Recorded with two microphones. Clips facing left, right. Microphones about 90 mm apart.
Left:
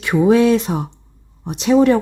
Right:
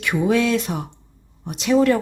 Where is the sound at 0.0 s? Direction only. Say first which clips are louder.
Left 6 dB; 30° left (ahead or behind).